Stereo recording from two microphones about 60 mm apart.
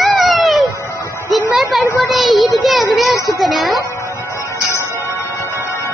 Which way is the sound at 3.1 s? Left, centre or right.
Left.